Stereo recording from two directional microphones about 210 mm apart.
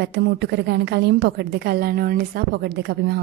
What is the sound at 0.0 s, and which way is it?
A woman's voice, 55° right (ahead or behind).